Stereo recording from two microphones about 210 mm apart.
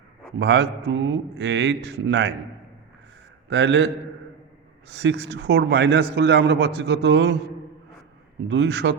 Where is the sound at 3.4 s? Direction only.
60° right (ahead or behind).